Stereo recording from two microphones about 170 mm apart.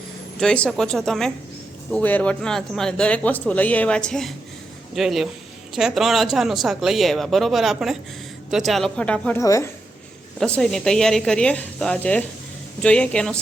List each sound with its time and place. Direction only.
0.3 s speech: 5° left (ahead or behind)
9.4 s a woman's voice: 20° left (ahead or behind)
10.4 s speech: 5° left (ahead or behind)